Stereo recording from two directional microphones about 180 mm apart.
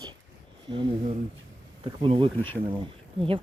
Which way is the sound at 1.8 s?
30° right (ahead or behind).